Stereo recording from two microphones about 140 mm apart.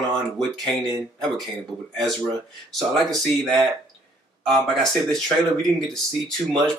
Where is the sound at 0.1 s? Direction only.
5° left (ahead or behind).